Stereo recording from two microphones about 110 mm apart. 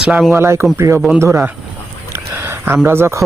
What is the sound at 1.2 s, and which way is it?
Speech, 20° right (ahead or behind).